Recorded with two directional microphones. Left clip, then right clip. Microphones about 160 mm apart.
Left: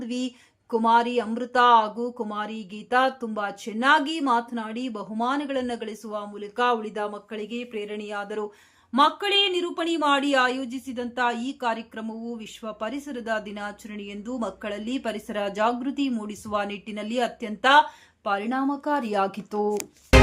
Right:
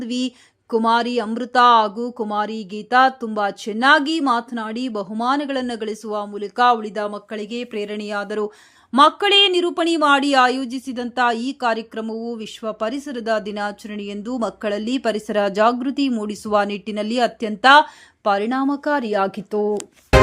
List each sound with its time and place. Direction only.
0.0 s speech: 35° right (ahead or behind)
19.0 s speech: 25° right (ahead or behind)